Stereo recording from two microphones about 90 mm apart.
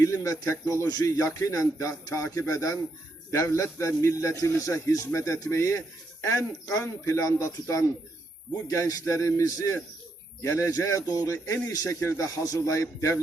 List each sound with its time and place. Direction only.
0.0 s speech: 35° left (ahead or behind)
0.9 s speech: 50° left (ahead or behind); by 13.1 s 30° left (ahead or behind)